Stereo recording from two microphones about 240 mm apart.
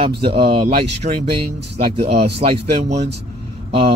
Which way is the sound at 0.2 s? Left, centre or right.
Right.